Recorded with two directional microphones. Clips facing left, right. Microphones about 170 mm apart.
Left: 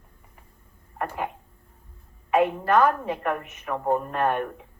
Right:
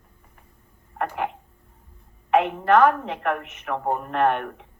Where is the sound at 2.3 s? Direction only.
70° right (ahead or behind).